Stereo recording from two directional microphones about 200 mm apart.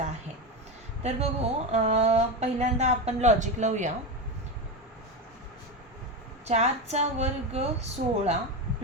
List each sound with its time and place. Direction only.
1.0 s speech: 35° right (ahead or behind)
6.5 s speech: 35° right (ahead or behind)